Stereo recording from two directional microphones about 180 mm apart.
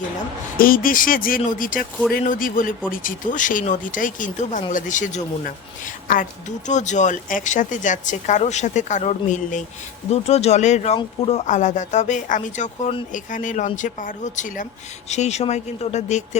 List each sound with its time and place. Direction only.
0.5 s speech: 50° left (ahead or behind)